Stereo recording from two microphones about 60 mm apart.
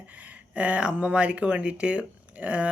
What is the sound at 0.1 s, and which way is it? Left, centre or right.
Speech, right.